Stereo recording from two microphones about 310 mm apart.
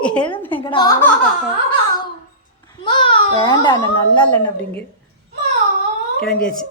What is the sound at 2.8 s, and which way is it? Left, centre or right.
Babbling, centre.